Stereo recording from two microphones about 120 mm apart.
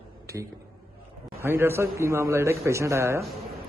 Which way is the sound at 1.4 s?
20° right (ahead or behind).